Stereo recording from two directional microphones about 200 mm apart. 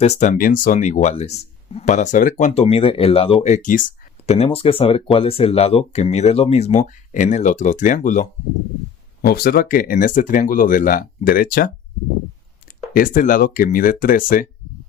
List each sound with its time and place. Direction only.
0.0 s speech: 35° left (ahead or behind)
4.3 s speech: 30° left (ahead or behind)